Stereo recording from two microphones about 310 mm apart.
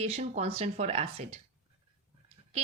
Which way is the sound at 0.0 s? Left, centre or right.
Right.